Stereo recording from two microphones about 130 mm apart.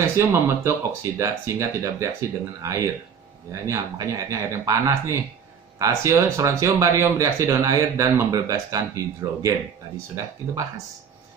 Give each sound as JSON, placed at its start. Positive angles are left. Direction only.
{"t": 0.0, "sound": "speech", "side_deg": -20}
{"t": 10.5, "sound": "speech", "side_deg": -20}